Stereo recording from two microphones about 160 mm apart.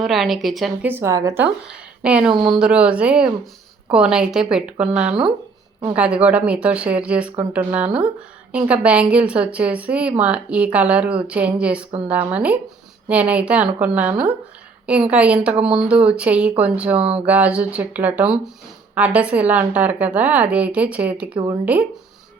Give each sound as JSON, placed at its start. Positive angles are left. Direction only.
{"t": 0.0, "sound": "speech", "side_deg": 0}
{"t": 0.9, "sound": "a woman's voice", "side_deg": -15}
{"t": 1.6, "sound": "a woman's voice", "side_deg": -5}